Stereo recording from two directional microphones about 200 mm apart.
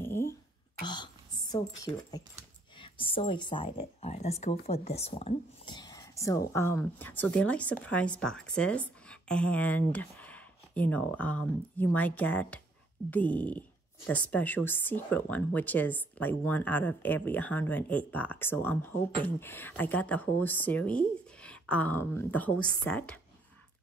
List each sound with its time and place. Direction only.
0.0 s a sound: 10° left (ahead or behind)
0.8 s speech: 20° left (ahead or behind)
5.8 s whispering: 20° left (ahead or behind)
6.5 s speech: 10° left (ahead or behind)